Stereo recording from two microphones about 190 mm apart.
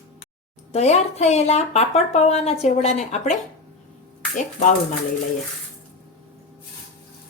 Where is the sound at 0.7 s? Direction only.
35° left (ahead or behind).